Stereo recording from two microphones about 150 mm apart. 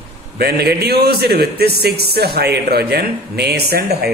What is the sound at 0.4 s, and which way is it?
A man's voice, 90° right.